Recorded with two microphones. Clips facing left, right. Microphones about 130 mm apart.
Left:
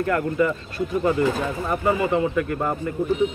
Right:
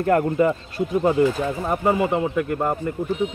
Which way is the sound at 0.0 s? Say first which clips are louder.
Right 3 dB; 35° right (ahead or behind).